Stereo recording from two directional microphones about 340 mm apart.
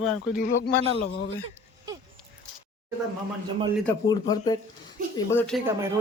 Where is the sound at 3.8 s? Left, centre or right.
Centre.